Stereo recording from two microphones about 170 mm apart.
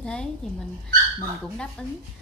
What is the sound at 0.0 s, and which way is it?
Speech, 5° left (ahead or behind).